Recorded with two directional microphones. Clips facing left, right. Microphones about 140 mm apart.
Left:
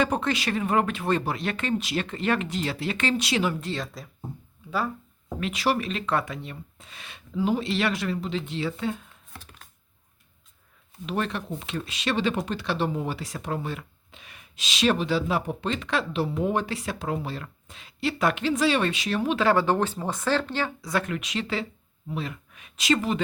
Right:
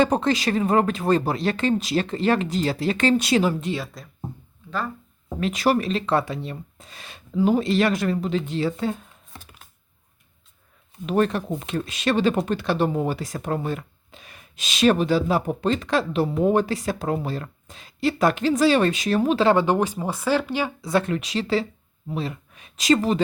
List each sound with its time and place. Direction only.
0.0 s speech: 35° right (ahead or behind)
3.6 s speech: 15° right (ahead or behind)
5.4 s speech: 45° right (ahead or behind)
11.0 s speech: 45° right (ahead or behind)
19.5 s speech: 20° right (ahead or behind)
20.8 s speech: 30° right (ahead or behind)